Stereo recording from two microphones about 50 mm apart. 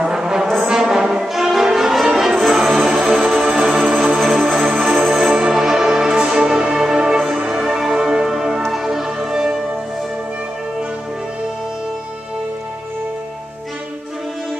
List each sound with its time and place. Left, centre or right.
0.0 s brass instrument: centre
1.2 s music: centre
3.7 s music: right
4.0 s music: centre